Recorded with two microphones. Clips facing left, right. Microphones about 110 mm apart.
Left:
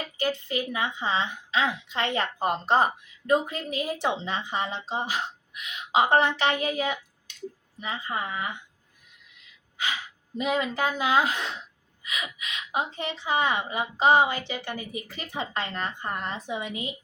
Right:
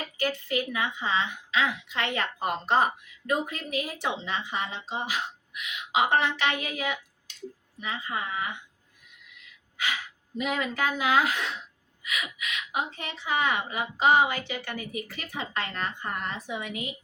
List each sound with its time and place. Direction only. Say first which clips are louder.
0.2 s a woman's voice: even; 25° left (ahead or behind)
10.3 s a woman's voice: left 3 dB; 25° left (ahead or behind)